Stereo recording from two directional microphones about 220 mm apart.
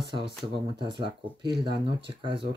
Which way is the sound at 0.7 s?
20° right (ahead or behind).